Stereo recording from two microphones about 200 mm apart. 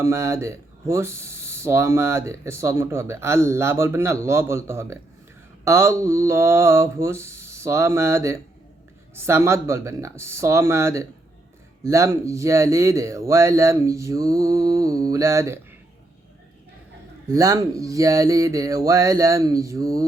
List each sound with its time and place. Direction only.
0.0 s speech: 15° right (ahead or behind)
17.2 s speech: 15° right (ahead or behind)